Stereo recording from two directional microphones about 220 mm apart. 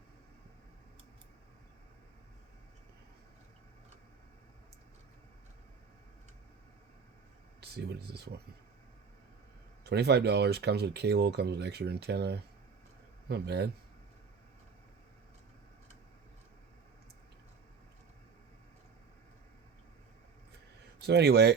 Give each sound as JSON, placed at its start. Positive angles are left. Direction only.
{"t": 7.6, "sound": "speech", "side_deg": -50}
{"t": 9.8, "sound": "speech", "side_deg": -50}
{"t": 21.0, "sound": "speech", "side_deg": -50}